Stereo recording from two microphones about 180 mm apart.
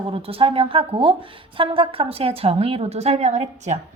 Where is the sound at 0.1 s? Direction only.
30° right (ahead or behind).